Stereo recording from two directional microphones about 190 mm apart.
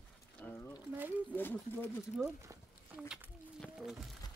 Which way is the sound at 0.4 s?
5° left (ahead or behind).